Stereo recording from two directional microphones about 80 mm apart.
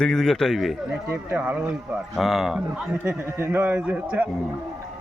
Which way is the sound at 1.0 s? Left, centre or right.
Right.